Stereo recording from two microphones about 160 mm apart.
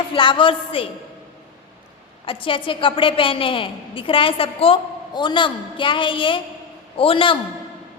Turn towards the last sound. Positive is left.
turn(degrees=35)  # may be behind; listen again after turning